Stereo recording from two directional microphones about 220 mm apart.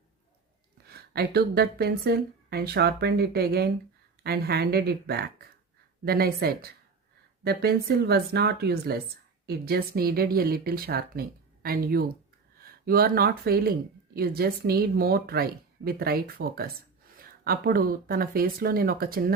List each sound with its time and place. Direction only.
0.9 s speech: 45° right (ahead or behind)